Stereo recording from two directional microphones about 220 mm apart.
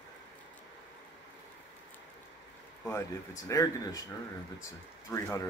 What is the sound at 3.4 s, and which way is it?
Speech, 15° left (ahead or behind).